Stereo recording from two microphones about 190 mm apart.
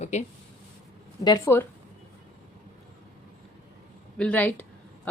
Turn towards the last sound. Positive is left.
turn(degrees=10)  # may be behind; listen again after turning